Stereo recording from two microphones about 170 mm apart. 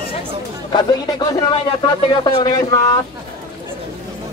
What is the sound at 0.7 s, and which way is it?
A man's voice, 25° left (ahead or behind).